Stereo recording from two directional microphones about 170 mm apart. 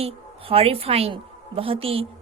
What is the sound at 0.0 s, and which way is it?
A woman's voice, 35° right (ahead or behind).